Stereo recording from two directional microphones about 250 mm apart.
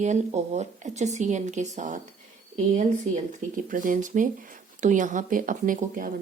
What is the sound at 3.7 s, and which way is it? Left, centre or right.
Speech, right.